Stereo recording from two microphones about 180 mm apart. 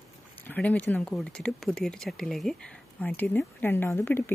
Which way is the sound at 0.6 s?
10° left (ahead or behind).